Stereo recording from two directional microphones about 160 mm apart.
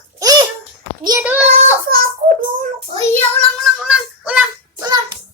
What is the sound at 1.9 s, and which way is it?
Child singing, 65° right (ahead or behind).